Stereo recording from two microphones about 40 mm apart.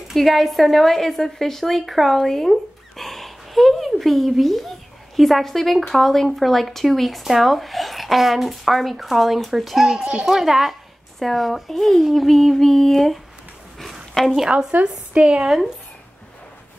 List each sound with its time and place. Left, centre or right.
0.1 s a woman's voice: centre
14.8 s a woman's voice: right
15.4 s speech: centre